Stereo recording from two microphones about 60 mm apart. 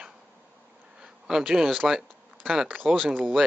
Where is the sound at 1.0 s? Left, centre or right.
Centre.